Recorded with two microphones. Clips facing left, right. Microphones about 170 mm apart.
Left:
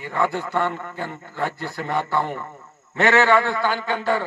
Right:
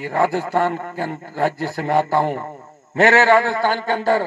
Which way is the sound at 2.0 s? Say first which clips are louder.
Right 5 dB; 40° right (ahead or behind).